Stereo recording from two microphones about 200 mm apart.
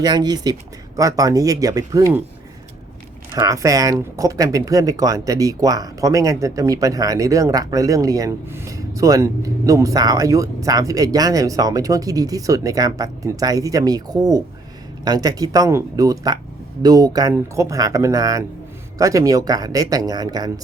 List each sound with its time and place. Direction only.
0.0 s speech: 20° right (ahead or behind)
3.3 s speech: 15° right (ahead or behind)